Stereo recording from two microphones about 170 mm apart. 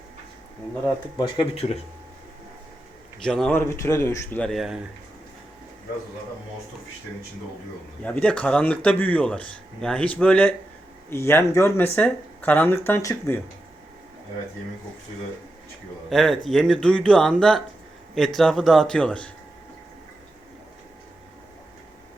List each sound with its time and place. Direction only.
1.2 s speech: 35° left (ahead or behind)
3.2 s speech: 5° left (ahead or behind)
3.7 s speech: 15° left (ahead or behind); by 4.8 s centre (ahead or behind)
8.0 s speech: 10° left (ahead or behind)
16.0 s speech: centre (ahead or behind)